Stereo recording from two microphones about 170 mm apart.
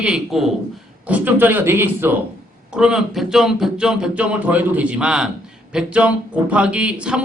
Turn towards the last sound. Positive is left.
turn(degrees=-5)  # may be behind; listen again after turning